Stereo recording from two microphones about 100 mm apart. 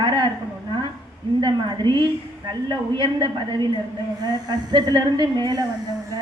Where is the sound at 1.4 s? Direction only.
50° right (ahead or behind).